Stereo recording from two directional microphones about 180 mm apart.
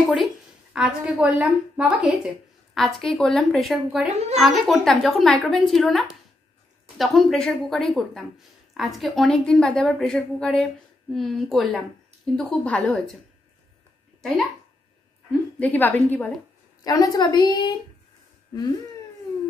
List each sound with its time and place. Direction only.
0.7 s a woman's voice: 5° right (ahead or behind)
15.6 s a woman's voice: 10° left (ahead or behind)
16.8 s a woman's voice: 20° left (ahead or behind)